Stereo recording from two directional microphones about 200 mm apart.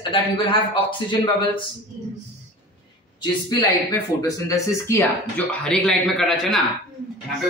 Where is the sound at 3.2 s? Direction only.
20° left (ahead or behind).